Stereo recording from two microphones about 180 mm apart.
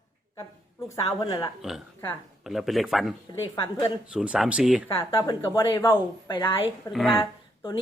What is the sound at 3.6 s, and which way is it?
Speech, 30° left (ahead or behind).